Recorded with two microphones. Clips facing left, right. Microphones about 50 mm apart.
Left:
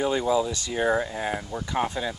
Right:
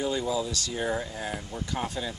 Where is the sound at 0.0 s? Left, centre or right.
Left.